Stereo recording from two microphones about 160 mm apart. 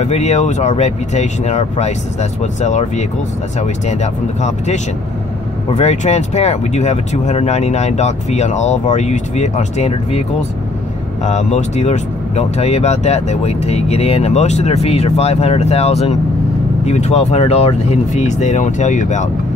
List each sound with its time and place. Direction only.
0.0 s speech: 45° left (ahead or behind)
5.8 s speech: 40° left (ahead or behind)
11.2 s speech: 45° left (ahead or behind)